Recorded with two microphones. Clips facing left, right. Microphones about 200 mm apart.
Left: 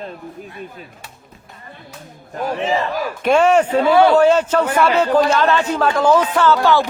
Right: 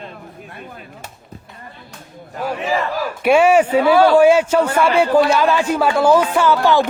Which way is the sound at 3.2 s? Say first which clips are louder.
Right 1 dB; 10° right (ahead or behind).